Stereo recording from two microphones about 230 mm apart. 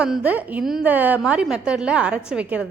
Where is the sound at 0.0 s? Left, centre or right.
Centre.